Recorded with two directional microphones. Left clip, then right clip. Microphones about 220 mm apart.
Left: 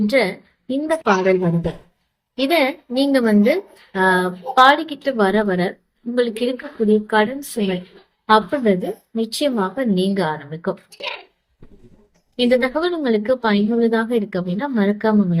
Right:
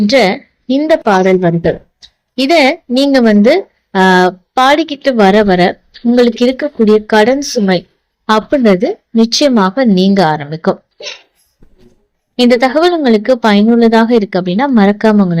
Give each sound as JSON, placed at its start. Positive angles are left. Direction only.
{"t": 0.1, "sound": "a woman's voice", "side_deg": -35}
{"t": 12.4, "sound": "a woman's voice", "side_deg": -40}